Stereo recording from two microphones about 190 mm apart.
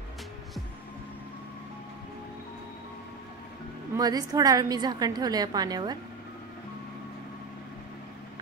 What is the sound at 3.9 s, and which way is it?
A woman's voice, 20° right (ahead or behind).